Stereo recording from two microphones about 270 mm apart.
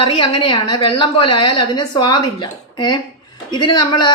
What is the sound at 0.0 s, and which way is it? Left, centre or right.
A woman's voice, centre.